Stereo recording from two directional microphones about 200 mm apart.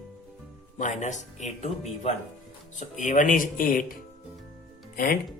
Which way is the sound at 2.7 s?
40° left (ahead or behind).